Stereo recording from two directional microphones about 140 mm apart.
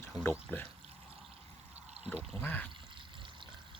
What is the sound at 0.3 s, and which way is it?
Speech, 15° left (ahead or behind).